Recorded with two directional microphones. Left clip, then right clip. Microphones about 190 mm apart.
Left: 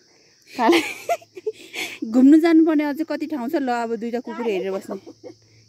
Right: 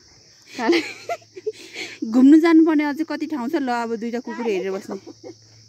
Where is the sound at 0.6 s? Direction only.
40° left (ahead or behind).